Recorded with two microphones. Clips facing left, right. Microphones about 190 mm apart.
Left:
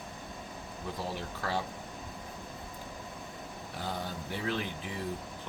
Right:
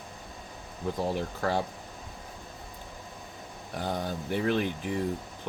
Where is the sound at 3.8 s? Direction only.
50° right (ahead or behind).